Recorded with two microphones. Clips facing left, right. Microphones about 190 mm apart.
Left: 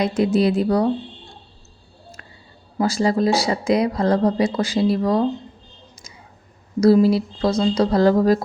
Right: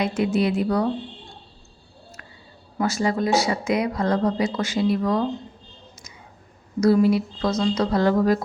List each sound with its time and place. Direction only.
0.0 s speech: 35° left (ahead or behind)
2.7 s speech: 35° left (ahead or behind)
6.7 s speech: 35° left (ahead or behind)